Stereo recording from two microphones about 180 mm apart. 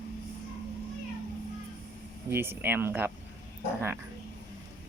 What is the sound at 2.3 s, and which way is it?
Speech, 10° right (ahead or behind).